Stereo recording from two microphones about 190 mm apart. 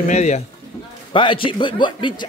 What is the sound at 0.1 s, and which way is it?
Speech, 35° left (ahead or behind).